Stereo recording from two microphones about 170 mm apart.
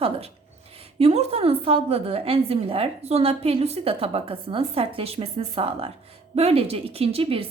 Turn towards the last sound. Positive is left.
turn(degrees=-35)  # may be behind; listen again after turning